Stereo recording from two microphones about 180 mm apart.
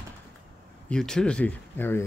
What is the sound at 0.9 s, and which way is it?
Speech, 5° left (ahead or behind).